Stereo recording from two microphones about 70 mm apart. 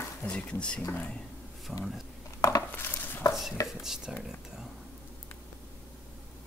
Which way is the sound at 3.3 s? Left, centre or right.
Centre.